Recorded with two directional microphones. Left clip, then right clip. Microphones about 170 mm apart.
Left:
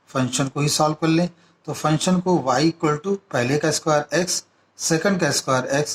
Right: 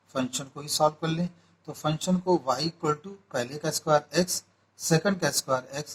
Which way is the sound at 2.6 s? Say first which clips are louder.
Left 8 dB; 20° left (ahead or behind).